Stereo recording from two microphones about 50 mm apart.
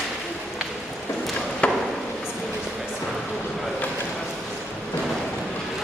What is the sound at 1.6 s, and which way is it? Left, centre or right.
Chop, left.